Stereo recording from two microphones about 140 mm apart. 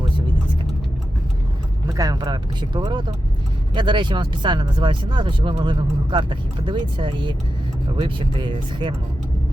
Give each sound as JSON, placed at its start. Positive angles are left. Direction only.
{"t": 1.9, "sound": "speech", "side_deg": -25}